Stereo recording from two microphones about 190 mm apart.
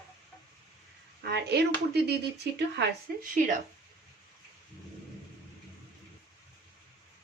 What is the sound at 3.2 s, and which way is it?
Speech, 45° right (ahead or behind).